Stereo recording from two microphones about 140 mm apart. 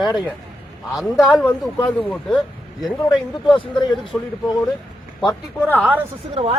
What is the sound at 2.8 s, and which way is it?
Speech, 30° left (ahead or behind).